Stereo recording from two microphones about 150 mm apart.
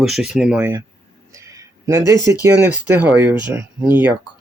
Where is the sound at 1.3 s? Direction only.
20° right (ahead or behind).